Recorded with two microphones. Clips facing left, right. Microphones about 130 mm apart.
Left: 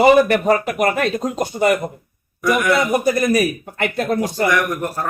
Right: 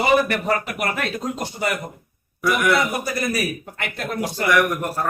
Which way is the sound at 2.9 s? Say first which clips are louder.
Left 8 dB; 45° left (ahead or behind).